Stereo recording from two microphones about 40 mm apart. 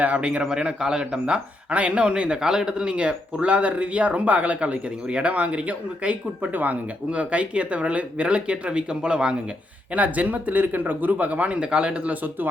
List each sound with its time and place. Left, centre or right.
0.0 s speech: right
0.5 s speech: centre; by 6.5 s right
6.5 s speech: right
7.1 s speech: right
9.9 s speech: right